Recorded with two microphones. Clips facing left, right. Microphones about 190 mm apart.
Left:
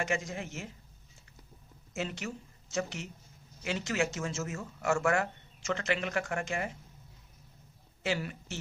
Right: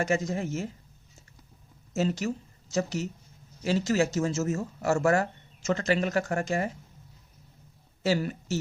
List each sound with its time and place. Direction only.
0.0 s speech: 40° right (ahead or behind)
1.9 s speech: 40° right (ahead or behind)
8.0 s speech: 40° right (ahead or behind)